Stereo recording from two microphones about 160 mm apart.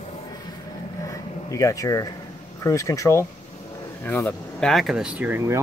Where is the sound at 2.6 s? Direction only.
20° left (ahead or behind).